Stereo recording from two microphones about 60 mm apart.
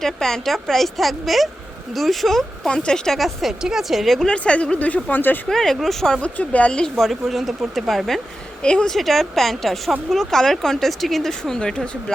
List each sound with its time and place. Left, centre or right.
0.0 s speech: centre
2.6 s speech: centre
3.2 s speech: centre
4.3 s speech: centre
5.0 s speech: left
5.5 s speech: centre
6.2 s speech: left
6.9 s speech: centre
8.6 s speech: centre